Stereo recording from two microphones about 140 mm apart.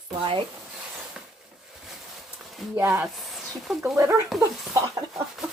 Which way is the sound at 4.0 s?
20° right (ahead or behind).